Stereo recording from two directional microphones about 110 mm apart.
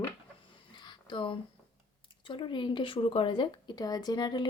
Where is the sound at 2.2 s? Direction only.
50° left (ahead or behind).